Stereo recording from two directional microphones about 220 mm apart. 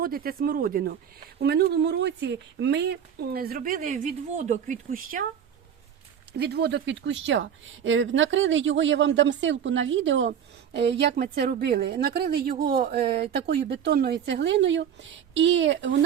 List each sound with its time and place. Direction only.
0.0 s speech: 40° right (ahead or behind)
6.3 s speech: 50° right (ahead or behind)